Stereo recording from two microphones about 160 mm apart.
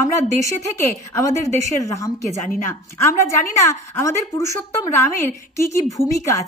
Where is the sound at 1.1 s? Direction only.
20° left (ahead or behind).